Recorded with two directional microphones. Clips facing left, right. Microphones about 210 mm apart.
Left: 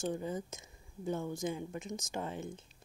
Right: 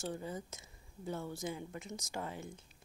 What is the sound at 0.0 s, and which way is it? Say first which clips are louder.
Speech: left 5 dB; 15° left (ahead or behind).